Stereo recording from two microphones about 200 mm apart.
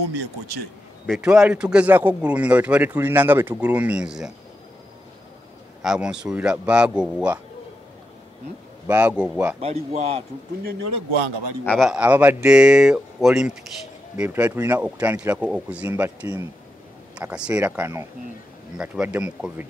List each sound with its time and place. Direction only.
1.0 s a man's voice: centre (ahead or behind)
5.8 s speech: 5° right (ahead or behind)
8.8 s a man's voice: 10° right (ahead or behind)
9.6 s a man's voice: 30° right (ahead or behind)
11.6 s a man's voice: centre (ahead or behind)